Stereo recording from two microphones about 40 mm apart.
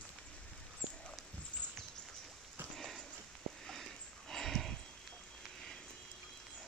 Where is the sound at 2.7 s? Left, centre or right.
Centre.